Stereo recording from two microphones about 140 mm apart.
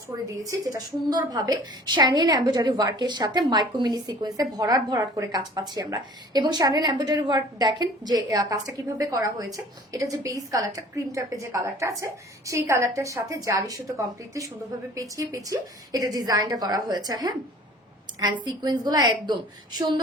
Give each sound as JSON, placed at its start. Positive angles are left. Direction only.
{"t": 0.1, "sound": "a woman's voice", "side_deg": -25}